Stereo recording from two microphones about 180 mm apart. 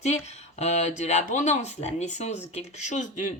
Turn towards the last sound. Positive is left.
turn(degrees=45)  # may be behind; listen again after turning